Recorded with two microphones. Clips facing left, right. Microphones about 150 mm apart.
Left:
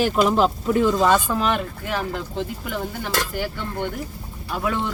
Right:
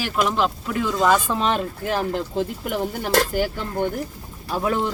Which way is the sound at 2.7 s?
45° right (ahead or behind).